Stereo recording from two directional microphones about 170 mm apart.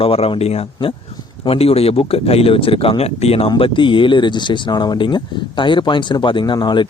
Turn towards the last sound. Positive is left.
turn(degrees=25)  # may be behind; listen again after turning